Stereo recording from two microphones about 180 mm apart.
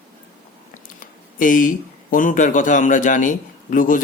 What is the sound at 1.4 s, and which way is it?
Speech, 45° left (ahead or behind).